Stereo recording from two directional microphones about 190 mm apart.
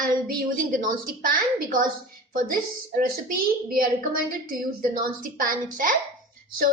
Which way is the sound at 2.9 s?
45° right (ahead or behind).